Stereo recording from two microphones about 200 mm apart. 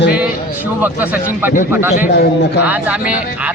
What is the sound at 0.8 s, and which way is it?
Speech, 10° right (ahead or behind).